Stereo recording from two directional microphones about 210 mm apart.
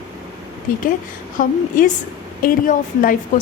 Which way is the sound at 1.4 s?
40° left (ahead or behind).